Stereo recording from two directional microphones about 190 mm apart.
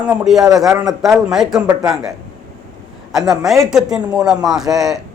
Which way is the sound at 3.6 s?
5° right (ahead or behind).